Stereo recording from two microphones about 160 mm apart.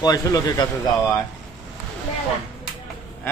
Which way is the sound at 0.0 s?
25° left (ahead or behind).